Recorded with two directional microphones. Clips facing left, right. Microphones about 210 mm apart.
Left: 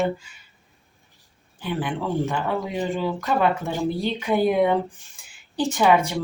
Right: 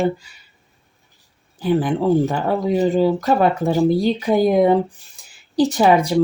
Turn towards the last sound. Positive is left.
turn(degrees=-35)  # may be behind; listen again after turning